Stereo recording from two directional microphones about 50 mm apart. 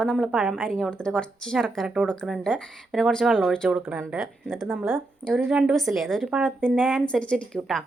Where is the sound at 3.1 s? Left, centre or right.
Centre.